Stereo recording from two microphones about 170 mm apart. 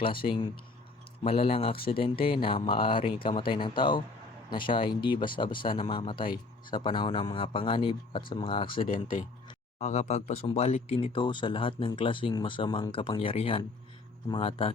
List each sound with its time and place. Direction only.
0.3 s speech: 25° left (ahead or behind)
9.7 s speech: 40° left (ahead or behind)